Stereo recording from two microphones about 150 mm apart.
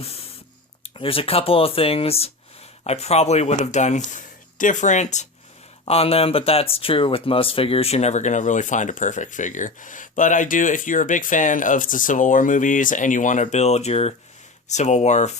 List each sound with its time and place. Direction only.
0.9 s speech: 40° left (ahead or behind)
5.8 s speech: 40° left (ahead or behind)